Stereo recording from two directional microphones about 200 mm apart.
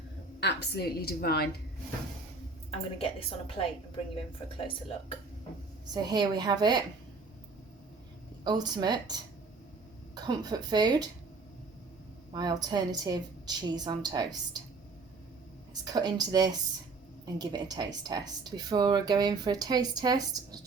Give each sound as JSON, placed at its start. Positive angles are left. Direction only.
{"t": 0.3, "sound": "a woman's voice", "side_deg": 55}
{"t": 2.6, "sound": "a woman's voice", "side_deg": 30}
{"t": 5.8, "sound": "speech", "side_deg": -20}
{"t": 8.4, "sound": "speech", "side_deg": -20}
{"t": 12.3, "sound": "speech", "side_deg": -20}
{"t": 15.7, "sound": "speech", "side_deg": -20}